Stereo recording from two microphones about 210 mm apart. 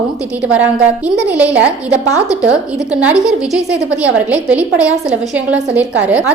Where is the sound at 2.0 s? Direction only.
15° left (ahead or behind).